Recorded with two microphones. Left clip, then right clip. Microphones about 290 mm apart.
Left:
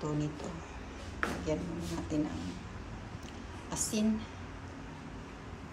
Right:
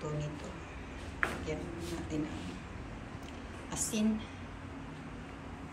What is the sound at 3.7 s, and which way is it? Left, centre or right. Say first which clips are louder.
Speech: left 1 dB; centre.